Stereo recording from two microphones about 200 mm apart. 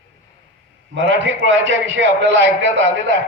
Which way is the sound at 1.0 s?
65° right (ahead or behind).